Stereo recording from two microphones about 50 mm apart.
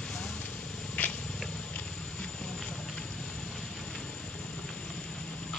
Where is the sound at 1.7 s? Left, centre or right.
Left.